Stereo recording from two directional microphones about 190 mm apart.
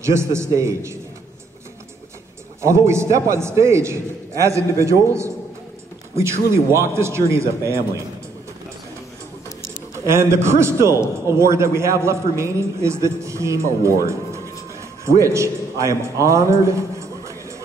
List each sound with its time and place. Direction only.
0.0 s a man's voice: 15° right (ahead or behind)
2.6 s a man's voice: 15° right (ahead or behind)
9.9 s a man's voice: 15° right (ahead or behind)
15.0 s a man's voice: 15° right (ahead or behind)